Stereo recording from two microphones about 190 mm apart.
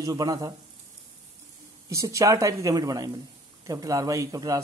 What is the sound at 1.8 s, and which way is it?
A man's voice, 15° right (ahead or behind).